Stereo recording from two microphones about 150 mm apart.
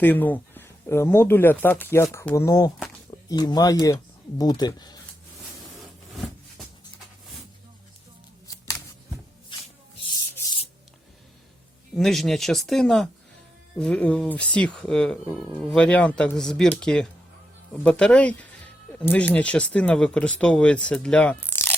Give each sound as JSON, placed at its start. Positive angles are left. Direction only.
{"t": 0.0, "sound": "speech", "side_deg": 10}
{"t": 11.9, "sound": "speech", "side_deg": 0}